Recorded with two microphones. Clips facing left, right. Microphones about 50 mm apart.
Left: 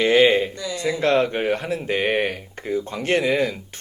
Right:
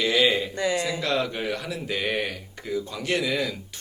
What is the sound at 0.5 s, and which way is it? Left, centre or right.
Speech, right.